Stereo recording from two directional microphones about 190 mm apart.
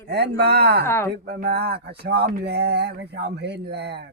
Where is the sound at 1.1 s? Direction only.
55° right (ahead or behind).